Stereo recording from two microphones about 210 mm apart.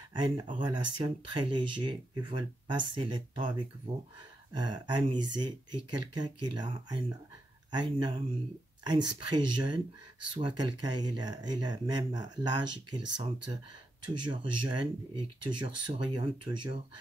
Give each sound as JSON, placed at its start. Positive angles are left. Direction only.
{"t": 0.1, "sound": "speech", "side_deg": -20}